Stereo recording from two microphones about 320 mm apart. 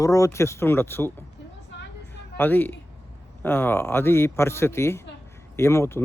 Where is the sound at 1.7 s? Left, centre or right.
Left.